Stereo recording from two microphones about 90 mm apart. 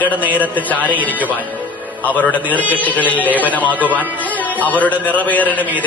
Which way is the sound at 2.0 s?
20° left (ahead or behind).